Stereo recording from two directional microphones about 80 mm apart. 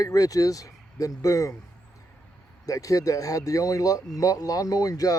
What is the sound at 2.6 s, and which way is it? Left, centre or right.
Speech, left.